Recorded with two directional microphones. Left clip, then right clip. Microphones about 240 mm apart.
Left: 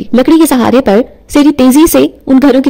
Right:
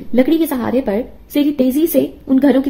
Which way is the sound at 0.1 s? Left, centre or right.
Left.